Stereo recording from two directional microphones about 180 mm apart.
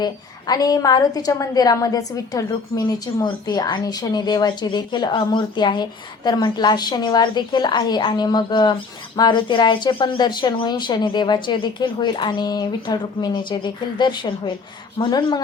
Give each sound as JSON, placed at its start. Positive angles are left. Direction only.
{"t": 0.0, "sound": "a woman's voice", "side_deg": 20}